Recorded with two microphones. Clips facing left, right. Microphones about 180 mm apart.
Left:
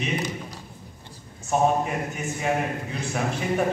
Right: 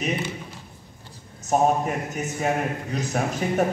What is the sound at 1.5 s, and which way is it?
A man's voice, 40° right (ahead or behind).